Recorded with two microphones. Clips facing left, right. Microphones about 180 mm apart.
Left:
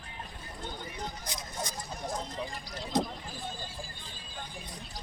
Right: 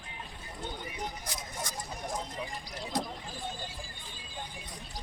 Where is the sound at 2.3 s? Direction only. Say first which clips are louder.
Left 1 dB; 15° right (ahead or behind).